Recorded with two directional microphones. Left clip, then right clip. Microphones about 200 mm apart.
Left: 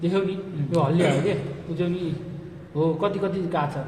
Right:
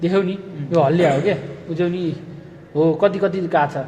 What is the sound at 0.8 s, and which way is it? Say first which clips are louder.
Speech: right 7 dB; 50° right (ahead or behind).